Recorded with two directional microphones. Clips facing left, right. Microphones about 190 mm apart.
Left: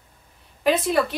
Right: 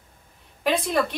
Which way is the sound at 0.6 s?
Centre (ahead or behind).